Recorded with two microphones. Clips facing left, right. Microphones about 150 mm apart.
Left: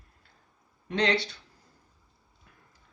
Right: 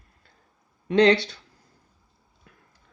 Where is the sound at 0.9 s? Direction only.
90° right.